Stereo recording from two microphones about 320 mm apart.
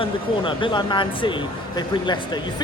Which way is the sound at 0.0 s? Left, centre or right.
Centre.